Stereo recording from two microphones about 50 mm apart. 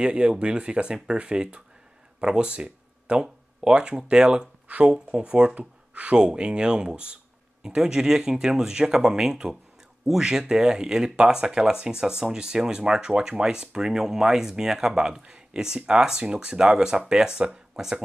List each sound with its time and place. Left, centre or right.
0.0 s speech: centre
4.6 s speech: right
4.9 s speech: centre